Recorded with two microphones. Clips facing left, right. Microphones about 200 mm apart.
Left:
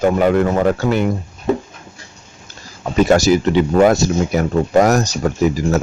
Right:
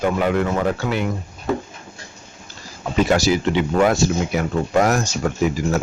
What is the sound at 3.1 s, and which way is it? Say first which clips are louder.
Speech: left 6 dB; 45° left (ahead or behind).